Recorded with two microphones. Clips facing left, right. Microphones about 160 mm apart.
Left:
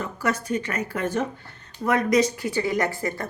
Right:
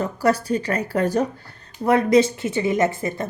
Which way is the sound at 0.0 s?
35° right (ahead or behind).